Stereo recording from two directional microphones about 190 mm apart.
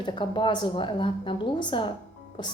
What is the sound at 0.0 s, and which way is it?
A woman's voice, 25° left (ahead or behind).